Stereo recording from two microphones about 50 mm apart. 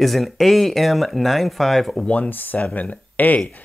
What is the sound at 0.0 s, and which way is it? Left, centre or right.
Speech, centre.